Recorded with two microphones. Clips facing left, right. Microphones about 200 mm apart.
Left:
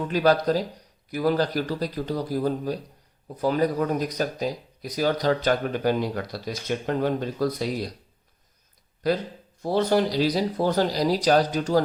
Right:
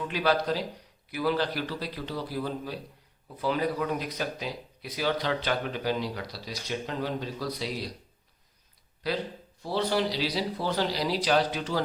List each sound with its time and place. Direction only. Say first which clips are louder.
0.1 s speech: left 6 dB; 45° left (ahead or behind)
9.0 s speech: left 6 dB; 45° left (ahead or behind)